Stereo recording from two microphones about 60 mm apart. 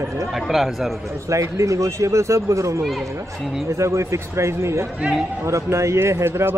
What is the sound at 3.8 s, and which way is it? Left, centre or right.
A man's voice, right.